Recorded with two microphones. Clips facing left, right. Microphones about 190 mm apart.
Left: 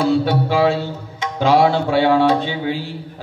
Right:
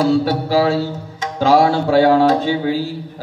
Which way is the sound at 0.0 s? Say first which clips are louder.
Right 1 dB; 40° right (ahead or behind).